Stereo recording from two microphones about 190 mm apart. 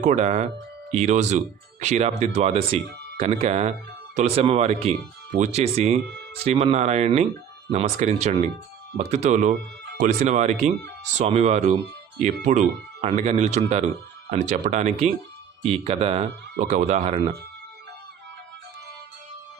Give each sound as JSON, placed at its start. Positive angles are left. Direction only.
{"t": 0.0, "sound": "speech", "side_deg": -40}